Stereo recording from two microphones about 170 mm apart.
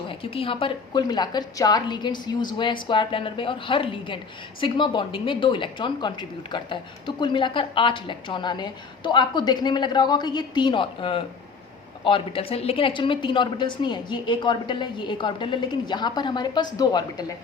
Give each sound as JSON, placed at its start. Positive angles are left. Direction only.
{"t": 0.1, "sound": "a woman's voice", "side_deg": 30}